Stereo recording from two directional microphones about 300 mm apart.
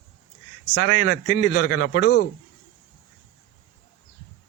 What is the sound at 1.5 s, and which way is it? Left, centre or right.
Speech, left.